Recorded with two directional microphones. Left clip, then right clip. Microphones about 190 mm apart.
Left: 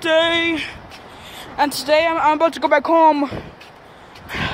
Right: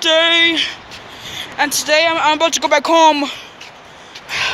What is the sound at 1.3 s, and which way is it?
Speech, 20° left (ahead or behind).